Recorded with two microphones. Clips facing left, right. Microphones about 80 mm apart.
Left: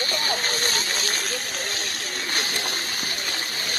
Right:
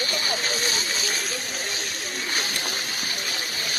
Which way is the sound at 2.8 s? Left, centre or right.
Left.